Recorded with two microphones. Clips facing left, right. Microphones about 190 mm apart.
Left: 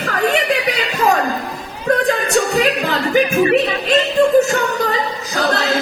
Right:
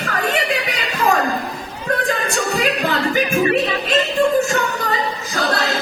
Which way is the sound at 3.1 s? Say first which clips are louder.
Left 6 dB; 40° left (ahead or behind).